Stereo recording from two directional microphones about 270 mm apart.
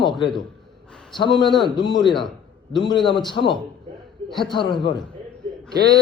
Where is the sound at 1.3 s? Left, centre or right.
Centre.